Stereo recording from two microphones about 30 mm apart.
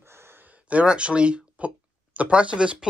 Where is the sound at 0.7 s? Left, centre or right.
Right.